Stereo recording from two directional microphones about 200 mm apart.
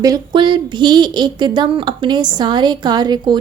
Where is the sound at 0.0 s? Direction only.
20° right (ahead or behind).